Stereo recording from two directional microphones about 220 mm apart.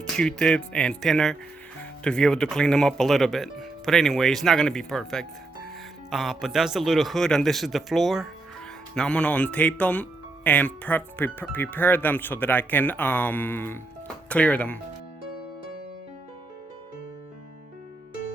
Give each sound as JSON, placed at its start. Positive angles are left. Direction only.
{"t": 0.0, "sound": "speech", "side_deg": 5}